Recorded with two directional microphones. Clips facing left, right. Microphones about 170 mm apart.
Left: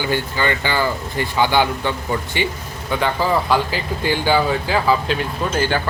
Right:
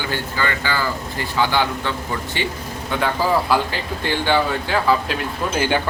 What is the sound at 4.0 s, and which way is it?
Speech, 5° left (ahead or behind).